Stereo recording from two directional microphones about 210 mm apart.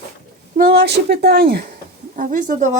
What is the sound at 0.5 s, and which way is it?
A woman's voice, 50° right (ahead or behind).